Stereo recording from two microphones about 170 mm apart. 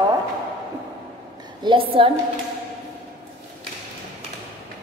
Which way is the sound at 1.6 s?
30° right (ahead or behind).